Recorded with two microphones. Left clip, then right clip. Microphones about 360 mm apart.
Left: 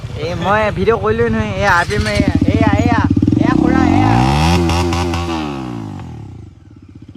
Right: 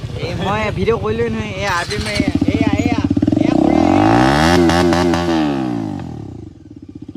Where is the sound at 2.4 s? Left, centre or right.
Centre.